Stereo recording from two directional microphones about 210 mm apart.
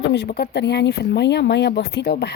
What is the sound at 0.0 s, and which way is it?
Speech, 55° left (ahead or behind).